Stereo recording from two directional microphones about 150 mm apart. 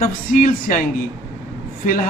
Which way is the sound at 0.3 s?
70° left (ahead or behind).